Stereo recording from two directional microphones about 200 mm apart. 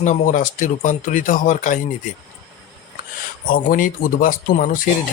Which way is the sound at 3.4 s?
45° left (ahead or behind).